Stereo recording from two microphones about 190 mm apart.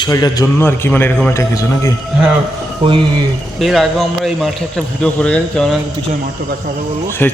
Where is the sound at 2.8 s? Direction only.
25° right (ahead or behind).